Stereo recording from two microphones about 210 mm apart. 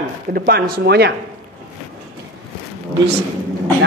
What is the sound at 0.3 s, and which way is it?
Speech, 45° right (ahead or behind).